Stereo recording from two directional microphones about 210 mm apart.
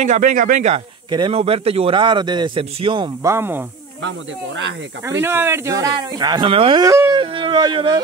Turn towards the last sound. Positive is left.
turn(degrees=-25)  # may be behind; listen again after turning